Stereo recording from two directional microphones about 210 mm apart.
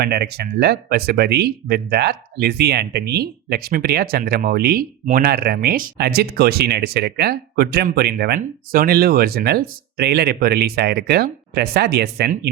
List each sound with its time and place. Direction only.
0.0 s speech: 50° right (ahead or behind)